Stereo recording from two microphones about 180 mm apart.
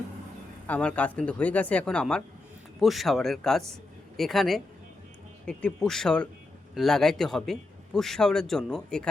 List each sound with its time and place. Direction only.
0.7 s a man's voice: 5° left (ahead or behind)